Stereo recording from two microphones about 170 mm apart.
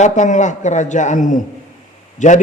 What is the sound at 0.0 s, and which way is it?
Speech, 45° left (ahead or behind).